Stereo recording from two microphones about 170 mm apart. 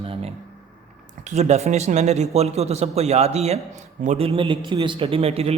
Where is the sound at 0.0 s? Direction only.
35° right (ahead or behind).